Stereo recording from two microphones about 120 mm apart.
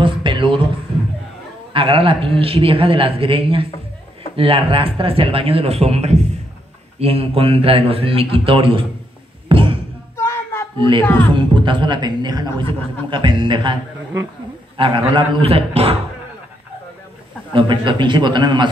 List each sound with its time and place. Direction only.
0.0 s a sound: 45° right (ahead or behind)
1.7 s a man's voice: 50° right (ahead or behind); by 6.2 s 65° right (ahead or behind)
7.0 s a man's voice: 55° right (ahead or behind)
9.5 s music: 45° right (ahead or behind)
10.1 s a sound: 20° left (ahead or behind)
11.1 s speech: 20° left (ahead or behind)
11.3 s a man's voice: 45° right (ahead or behind)
14.8 s a man's voice: 45° right (ahead or behind)
17.5 s a man's voice: 45° right (ahead or behind)